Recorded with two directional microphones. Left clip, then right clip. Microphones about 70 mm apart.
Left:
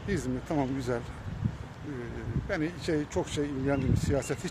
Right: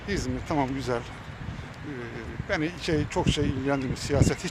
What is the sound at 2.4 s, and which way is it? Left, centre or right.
Speech, left.